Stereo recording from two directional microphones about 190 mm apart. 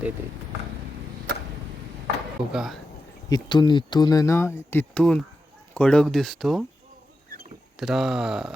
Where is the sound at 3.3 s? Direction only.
25° left (ahead or behind); by 6.6 s centre (ahead or behind).